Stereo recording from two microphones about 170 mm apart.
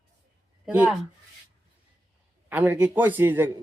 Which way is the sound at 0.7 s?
10° right (ahead or behind).